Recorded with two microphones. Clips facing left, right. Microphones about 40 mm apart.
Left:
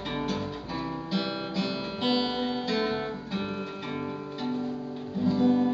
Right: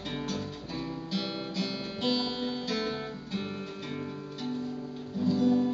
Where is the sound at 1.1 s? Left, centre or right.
Centre.